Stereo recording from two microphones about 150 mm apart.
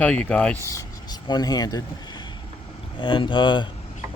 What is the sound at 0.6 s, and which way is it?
Speech, 20° left (ahead or behind).